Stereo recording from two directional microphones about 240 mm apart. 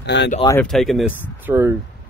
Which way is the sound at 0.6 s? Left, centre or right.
Centre.